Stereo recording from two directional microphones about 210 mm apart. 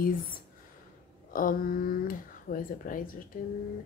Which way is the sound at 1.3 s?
40° left (ahead or behind).